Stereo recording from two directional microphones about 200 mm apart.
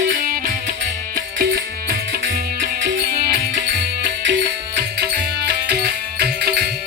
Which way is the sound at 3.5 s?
65° right (ahead or behind).